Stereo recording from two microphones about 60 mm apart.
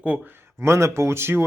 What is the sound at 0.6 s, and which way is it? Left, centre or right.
Speech, right.